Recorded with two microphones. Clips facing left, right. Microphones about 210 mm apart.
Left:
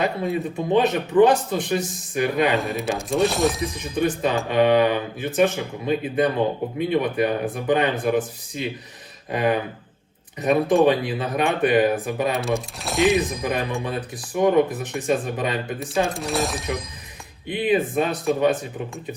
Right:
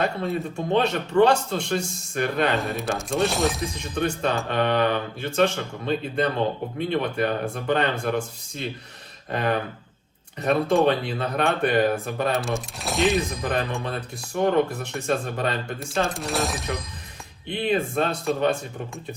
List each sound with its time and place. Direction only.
0.5 s speech: 15° left (ahead or behind)
2.6 s speech: centre (ahead or behind)
3.9 s speech: 10° left (ahead or behind)
13.4 s speech: 15° left (ahead or behind)
14.9 s speech: 5° left (ahead or behind)